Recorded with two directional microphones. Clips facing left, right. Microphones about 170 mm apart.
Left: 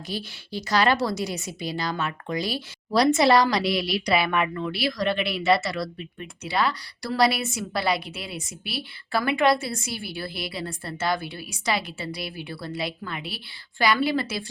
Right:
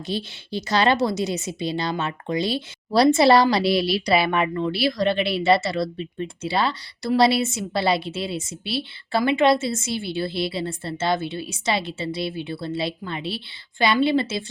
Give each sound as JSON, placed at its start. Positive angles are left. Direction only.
{"t": 0.1, "sound": "a woman's voice", "side_deg": -25}